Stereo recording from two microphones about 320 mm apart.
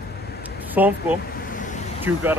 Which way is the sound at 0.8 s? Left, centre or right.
Centre.